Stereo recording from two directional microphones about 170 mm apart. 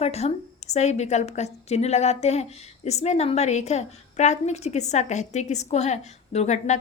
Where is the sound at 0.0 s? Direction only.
40° left (ahead or behind).